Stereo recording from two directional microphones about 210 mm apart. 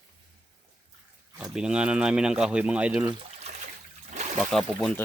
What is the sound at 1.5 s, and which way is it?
Speech, 5° right (ahead or behind).